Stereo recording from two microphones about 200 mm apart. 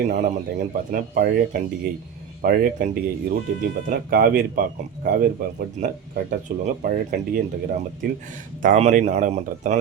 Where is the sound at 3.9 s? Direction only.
50° right (ahead or behind).